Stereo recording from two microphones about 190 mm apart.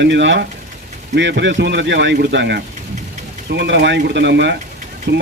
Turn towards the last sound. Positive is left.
turn(degrees=-65)  # may be behind; listen again after turning